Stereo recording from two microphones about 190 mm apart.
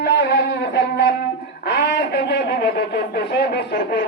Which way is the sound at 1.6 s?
65° left (ahead or behind).